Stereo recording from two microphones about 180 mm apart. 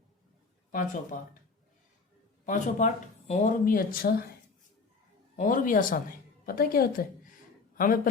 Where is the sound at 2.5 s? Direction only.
40° left (ahead or behind).